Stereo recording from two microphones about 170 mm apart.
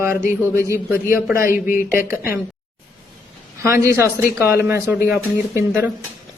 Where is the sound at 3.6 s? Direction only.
15° right (ahead or behind).